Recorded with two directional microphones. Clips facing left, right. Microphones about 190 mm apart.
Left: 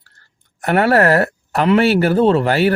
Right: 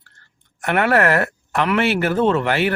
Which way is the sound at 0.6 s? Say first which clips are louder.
Left 4 dB; 35° left (ahead or behind).